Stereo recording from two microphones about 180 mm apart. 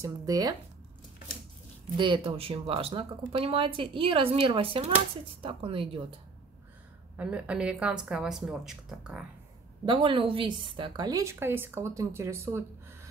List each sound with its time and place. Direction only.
0.0 s speech: 20° right (ahead or behind)
2.0 s speech: 25° right (ahead or behind)
7.2 s a woman's voice: 5° right (ahead or behind)
9.8 s a woman's voice: 30° right (ahead or behind)